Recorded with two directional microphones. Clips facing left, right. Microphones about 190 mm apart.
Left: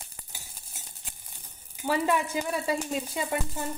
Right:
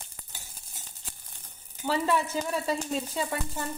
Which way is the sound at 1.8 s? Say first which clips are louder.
Left 1 dB; 15° left (ahead or behind).